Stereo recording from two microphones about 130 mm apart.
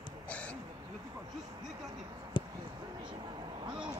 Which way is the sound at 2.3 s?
40° left (ahead or behind).